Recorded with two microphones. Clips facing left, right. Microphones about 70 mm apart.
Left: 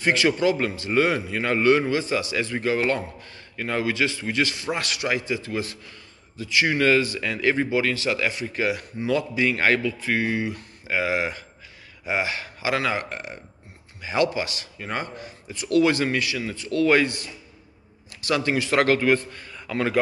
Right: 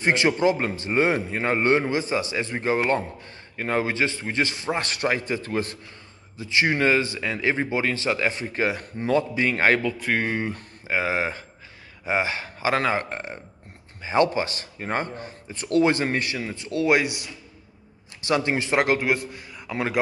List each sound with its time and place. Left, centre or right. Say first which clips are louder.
0.0 s a man's voice: even; right
6.3 s speech: even; right
9.8 s a man's voice: even; right; by 19.6 s centre
19.7 s a man's voice: left 2 dB; right